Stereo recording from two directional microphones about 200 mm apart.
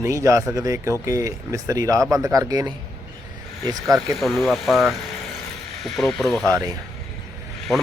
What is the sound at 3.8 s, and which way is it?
Speech, centre (ahead or behind).